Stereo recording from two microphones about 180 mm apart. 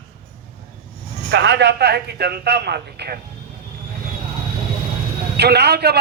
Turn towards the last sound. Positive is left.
turn(degrees=-65)  # may be behind; listen again after turning